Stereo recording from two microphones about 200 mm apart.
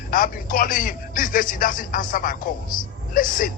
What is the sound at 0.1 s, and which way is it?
Speech, 45° left (ahead or behind).